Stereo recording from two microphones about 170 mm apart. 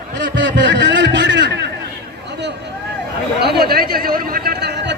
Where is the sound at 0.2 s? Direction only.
90° right.